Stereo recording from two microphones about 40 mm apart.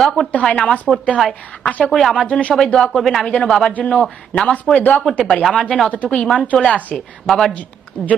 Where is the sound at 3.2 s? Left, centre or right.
Left.